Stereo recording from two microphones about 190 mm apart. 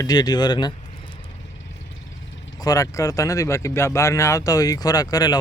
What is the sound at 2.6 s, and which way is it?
Speech, 20° left (ahead or behind).